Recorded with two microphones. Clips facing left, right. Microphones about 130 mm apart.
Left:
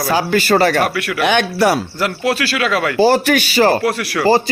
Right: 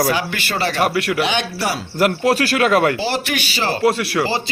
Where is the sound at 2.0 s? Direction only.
45° right (ahead or behind).